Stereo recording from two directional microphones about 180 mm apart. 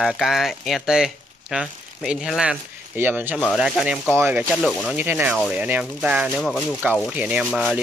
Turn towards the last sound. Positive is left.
turn(degrees=-5)  # may be behind; listen again after turning